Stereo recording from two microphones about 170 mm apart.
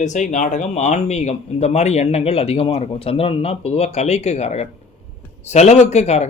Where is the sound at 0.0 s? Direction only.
45° left (ahead or behind).